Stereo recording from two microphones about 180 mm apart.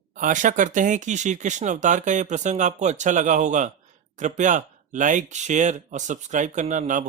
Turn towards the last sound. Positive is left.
turn(degrees=-45)  # may be behind; listen again after turning